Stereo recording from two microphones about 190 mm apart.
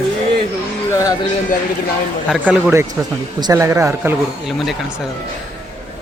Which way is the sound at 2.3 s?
5° right (ahead or behind).